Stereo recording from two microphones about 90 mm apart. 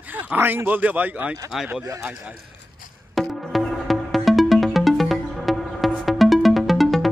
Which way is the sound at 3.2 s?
Centre (ahead or behind).